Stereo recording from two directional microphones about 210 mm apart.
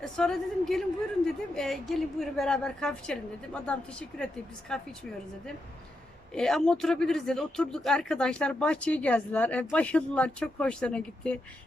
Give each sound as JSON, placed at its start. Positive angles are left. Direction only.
{"t": 0.0, "sound": "speech", "side_deg": 0}
{"t": 6.3, "sound": "speech", "side_deg": 5}